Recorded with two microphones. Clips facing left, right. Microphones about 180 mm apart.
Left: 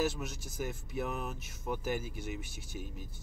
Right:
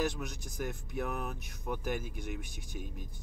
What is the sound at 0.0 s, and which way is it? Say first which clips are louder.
Speech: left 1 dB; 5° left (ahead or behind).